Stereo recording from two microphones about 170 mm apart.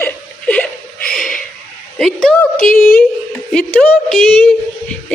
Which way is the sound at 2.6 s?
55° left (ahead or behind).